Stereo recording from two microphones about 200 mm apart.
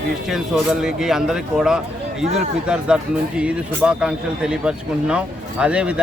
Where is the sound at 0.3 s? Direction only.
Centre (ahead or behind).